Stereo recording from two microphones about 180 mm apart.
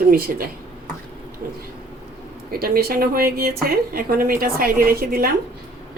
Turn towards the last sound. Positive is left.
turn(degrees=-55)  # may be behind; listen again after turning